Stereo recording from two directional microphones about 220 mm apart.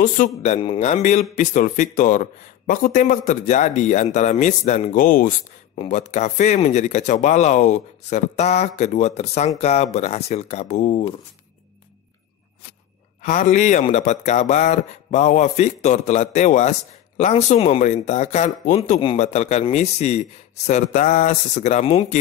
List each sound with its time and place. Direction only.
0.0 s speech: 35° left (ahead or behind)
13.2 s speech: 35° left (ahead or behind)